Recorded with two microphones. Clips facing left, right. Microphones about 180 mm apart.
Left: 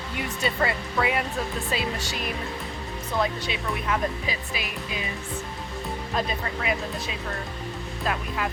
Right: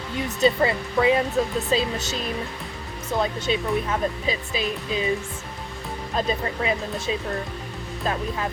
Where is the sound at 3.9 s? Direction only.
25° right (ahead or behind).